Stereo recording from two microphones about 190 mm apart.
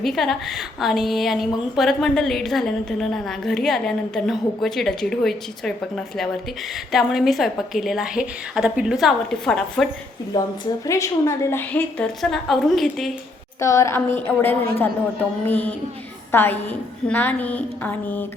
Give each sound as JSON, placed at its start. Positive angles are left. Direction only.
{"t": 0.0, "sound": "a woman's voice", "side_deg": 0}
{"t": 10.3, "sound": "a woman's voice", "side_deg": 20}
{"t": 13.6, "sound": "a woman's voice", "side_deg": 15}